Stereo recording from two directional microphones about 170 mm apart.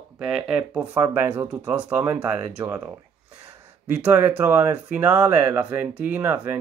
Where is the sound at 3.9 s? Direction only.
10° right (ahead or behind).